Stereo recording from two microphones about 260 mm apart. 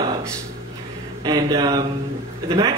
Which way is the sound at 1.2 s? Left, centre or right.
Centre.